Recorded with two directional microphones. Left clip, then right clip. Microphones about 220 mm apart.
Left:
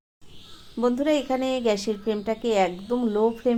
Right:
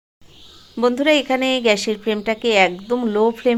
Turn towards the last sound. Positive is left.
turn(degrees=-25)  # may be behind; listen again after turning